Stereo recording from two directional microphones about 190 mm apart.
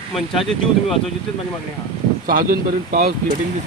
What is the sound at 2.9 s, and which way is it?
Speech, 50° right (ahead or behind).